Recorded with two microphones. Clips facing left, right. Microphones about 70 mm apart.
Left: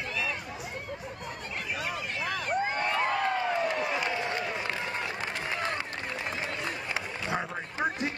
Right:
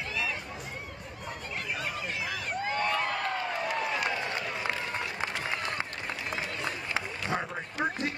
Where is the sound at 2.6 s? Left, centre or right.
Left.